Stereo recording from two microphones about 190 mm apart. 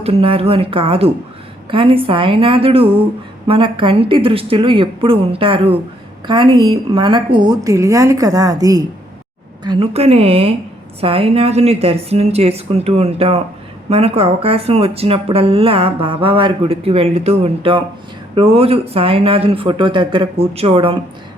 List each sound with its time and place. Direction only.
0.0 s a woman's voice: 30° right (ahead or behind)
9.6 s a woman's voice: 30° right (ahead or behind)